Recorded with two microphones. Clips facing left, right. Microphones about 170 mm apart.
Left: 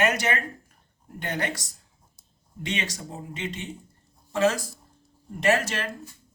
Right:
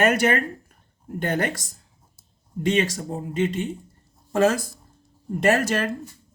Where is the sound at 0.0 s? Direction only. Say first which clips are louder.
Right 5 dB; 50° right (ahead or behind).